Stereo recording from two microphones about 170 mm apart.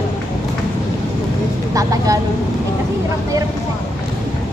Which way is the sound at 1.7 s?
20° right (ahead or behind).